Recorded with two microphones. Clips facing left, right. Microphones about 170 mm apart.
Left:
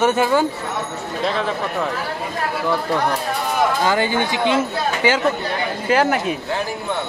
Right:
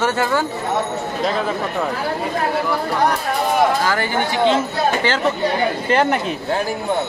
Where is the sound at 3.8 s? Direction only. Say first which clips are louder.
Left 1 dB; 20° left (ahead or behind).